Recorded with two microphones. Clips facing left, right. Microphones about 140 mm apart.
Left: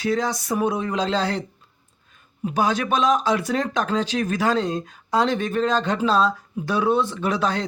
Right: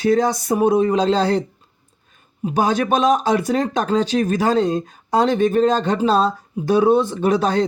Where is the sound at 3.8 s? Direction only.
35° right (ahead or behind).